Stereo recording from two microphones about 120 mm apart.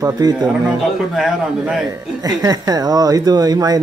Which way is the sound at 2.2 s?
30° right (ahead or behind).